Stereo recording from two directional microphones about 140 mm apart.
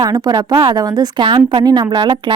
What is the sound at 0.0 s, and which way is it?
Speech, 30° right (ahead or behind).